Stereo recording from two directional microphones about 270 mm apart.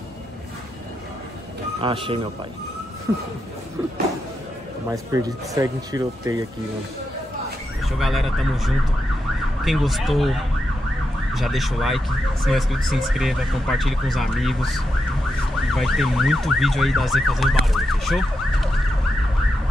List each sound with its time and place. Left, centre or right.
1.8 s speech: centre
4.8 s speech: centre
7.8 s ambulance: centre
11.3 s ambulance: centre